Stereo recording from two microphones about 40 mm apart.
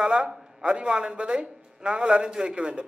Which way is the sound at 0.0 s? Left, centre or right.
Centre.